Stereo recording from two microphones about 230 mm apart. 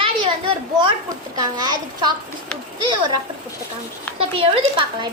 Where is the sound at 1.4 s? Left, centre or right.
Centre.